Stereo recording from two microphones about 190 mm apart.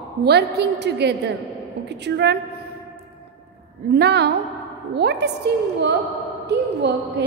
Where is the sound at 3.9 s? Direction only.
60° right (ahead or behind).